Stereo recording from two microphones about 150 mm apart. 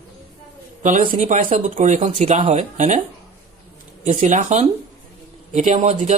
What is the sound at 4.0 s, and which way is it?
Speech, 55° right (ahead or behind).